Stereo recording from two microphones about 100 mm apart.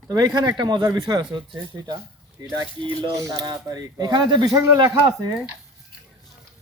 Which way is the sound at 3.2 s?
35° right (ahead or behind).